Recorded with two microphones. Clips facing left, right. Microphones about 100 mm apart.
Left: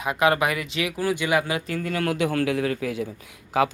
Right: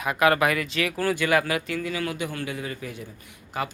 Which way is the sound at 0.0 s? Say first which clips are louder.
Even; 25° left (ahead or behind).